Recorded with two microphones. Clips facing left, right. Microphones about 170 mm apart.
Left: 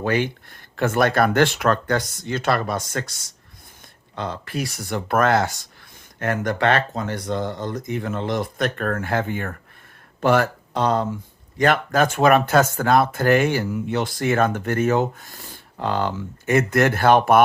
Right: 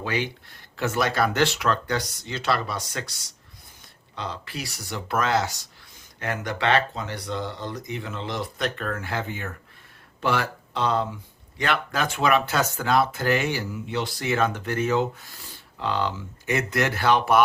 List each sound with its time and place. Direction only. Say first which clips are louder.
0.0 s speech: left 6 dB; 50° left (ahead or behind)